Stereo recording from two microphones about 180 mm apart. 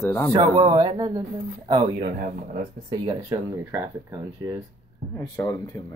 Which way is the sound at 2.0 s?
50° right (ahead or behind).